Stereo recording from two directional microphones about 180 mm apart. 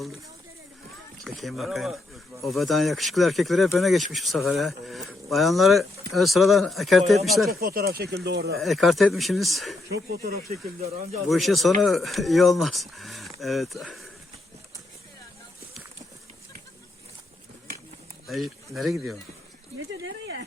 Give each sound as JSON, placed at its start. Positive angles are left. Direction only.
{"t": 1.2, "sound": "speech", "side_deg": 0}
{"t": 7.6, "sound": "speech", "side_deg": -55}
{"t": 8.5, "sound": "speech", "side_deg": 0}
{"t": 9.9, "sound": "speech", "side_deg": -60}
{"t": 11.3, "sound": "speech", "side_deg": 0}
{"t": 18.7, "sound": "speech", "side_deg": 0}
{"t": 19.9, "sound": "a sound", "side_deg": -85}